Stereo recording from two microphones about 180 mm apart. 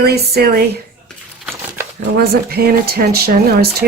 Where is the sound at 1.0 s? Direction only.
Centre (ahead or behind).